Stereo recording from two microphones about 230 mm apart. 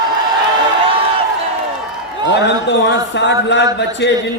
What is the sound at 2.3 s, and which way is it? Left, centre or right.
A man's voice, left.